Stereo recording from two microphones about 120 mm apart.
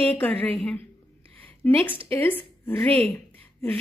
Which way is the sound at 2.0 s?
15° left (ahead or behind).